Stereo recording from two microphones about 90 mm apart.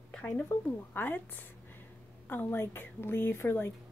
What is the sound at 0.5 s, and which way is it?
Speech, 25° left (ahead or behind).